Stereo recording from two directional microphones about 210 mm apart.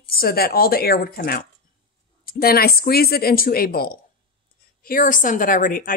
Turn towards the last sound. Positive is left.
turn(degrees=40)  # may be behind; listen again after turning